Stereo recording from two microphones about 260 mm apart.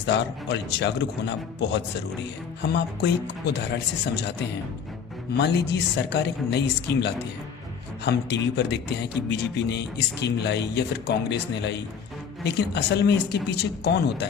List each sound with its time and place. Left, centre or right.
0.0 s speech: left
5.4 s speech: left